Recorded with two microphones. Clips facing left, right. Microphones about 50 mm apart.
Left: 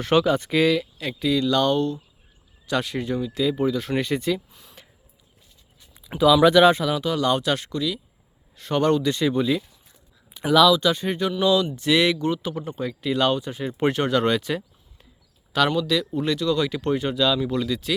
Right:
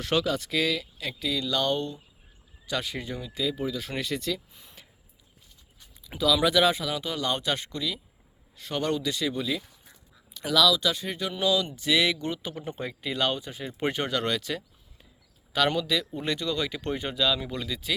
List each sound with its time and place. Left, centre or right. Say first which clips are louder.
0.0 s speech: left 7 dB; left
0.7 s speech: left 7 dB; centre
1.8 s speech: left 9 dB; centre
2.6 s speech: left 7 dB; centre
3.9 s speech: left 7 dB; centre
6.1 s speech: left 8 dB; centre
6.5 s speech: left 7 dB; centre
7.0 s speech: left 7 dB; centre
10.8 s speech: left 7 dB; centre
12.6 s speech: left 4 dB; centre
15.5 s speech: left 4 dB; centre
16.2 s speech: left 6 dB; centre
16.7 s speech: left 7 dB; centre